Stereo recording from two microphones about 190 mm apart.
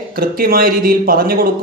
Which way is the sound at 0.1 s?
50° right (ahead or behind).